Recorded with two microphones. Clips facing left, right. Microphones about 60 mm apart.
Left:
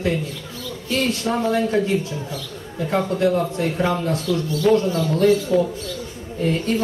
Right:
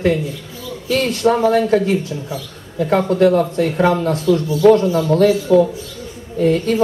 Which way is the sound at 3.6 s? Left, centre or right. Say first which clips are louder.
Right 6 dB; right.